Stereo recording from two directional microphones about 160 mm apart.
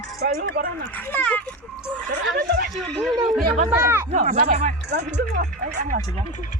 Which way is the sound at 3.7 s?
15° right (ahead or behind).